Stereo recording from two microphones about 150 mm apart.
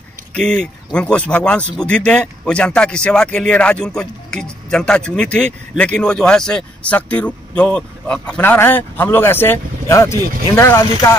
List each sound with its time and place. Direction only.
0.3 s a man's voice: 5° left (ahead or behind)